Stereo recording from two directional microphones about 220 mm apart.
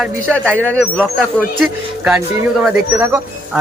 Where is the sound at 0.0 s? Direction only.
Centre (ahead or behind).